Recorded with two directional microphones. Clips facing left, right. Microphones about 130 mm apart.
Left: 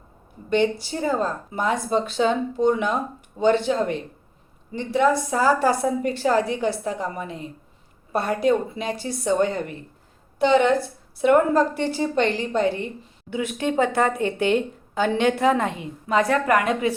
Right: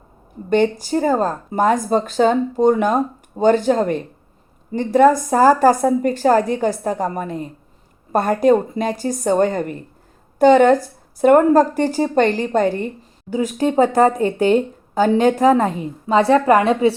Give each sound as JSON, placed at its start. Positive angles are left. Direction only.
{"t": 0.5, "sound": "speech", "side_deg": -45}